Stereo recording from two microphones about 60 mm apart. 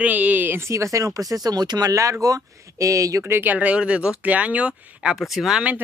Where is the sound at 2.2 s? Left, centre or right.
Right.